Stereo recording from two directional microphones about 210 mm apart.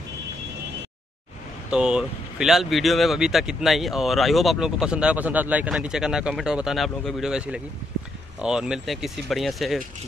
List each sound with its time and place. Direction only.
1.7 s speech: 5° right (ahead or behind)